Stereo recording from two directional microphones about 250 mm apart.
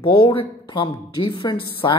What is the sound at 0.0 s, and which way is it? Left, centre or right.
Speech, centre.